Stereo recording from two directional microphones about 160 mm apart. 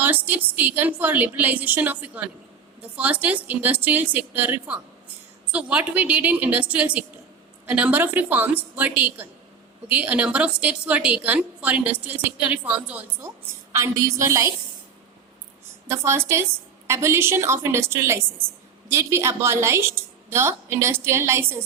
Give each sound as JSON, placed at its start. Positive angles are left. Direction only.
{"t": 0.0, "sound": "a woman's voice", "side_deg": -10}
{"t": 15.9, "sound": "a woman's voice", "side_deg": -15}